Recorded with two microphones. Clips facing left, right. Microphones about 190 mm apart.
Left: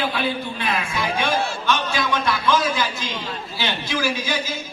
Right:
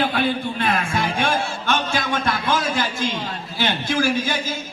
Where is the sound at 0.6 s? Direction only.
50° right (ahead or behind).